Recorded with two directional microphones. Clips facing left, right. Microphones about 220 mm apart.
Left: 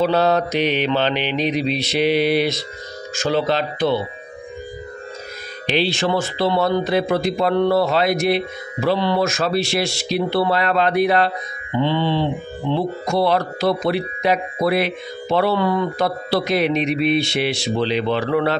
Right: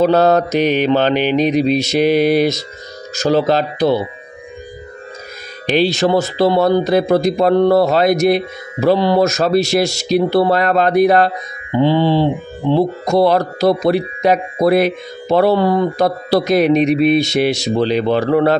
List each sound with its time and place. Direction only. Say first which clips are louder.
0.0 s speech: right 5 dB; 45° right (ahead or behind)
5.8 s speech: right 6 dB; 40° right (ahead or behind)